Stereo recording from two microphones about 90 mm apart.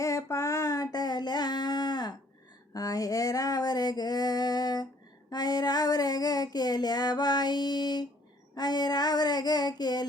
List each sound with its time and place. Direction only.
0.0 s a sound: 35° left (ahead or behind)
5.3 s female singing: 50° left (ahead or behind)
8.5 s child singing: 50° left (ahead or behind)